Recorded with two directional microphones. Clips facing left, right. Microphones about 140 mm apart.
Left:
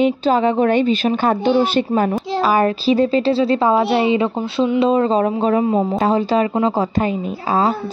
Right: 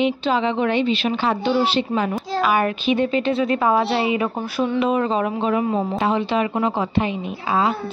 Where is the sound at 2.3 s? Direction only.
35° left (ahead or behind).